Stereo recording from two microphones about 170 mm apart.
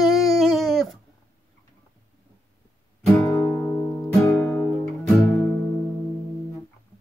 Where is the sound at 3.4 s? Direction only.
15° left (ahead or behind).